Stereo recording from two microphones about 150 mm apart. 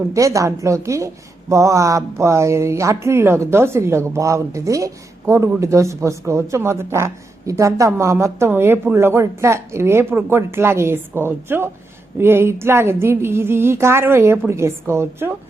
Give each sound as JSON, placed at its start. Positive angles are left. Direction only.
{"t": 0.1, "sound": "a woman's voice", "side_deg": -20}